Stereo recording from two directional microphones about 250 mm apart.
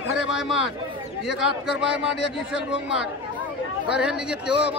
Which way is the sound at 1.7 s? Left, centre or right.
Centre.